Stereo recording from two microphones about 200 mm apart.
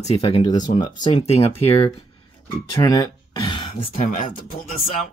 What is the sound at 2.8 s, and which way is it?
Speech, 20° left (ahead or behind).